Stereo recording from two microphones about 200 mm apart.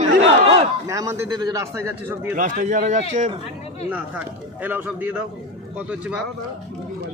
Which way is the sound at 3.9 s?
10° right (ahead or behind).